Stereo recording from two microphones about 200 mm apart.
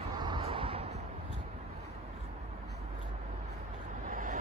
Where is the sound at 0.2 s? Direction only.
25° right (ahead or behind).